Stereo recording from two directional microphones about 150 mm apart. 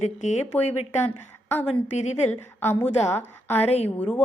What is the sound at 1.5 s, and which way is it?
Speech, 10° left (ahead or behind).